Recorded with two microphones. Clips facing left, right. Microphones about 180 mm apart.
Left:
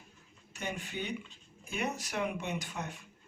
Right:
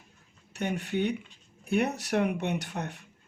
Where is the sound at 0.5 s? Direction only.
65° right (ahead or behind).